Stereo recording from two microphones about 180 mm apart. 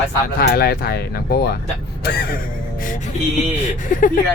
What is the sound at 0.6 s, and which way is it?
Speech, 60° left (ahead or behind).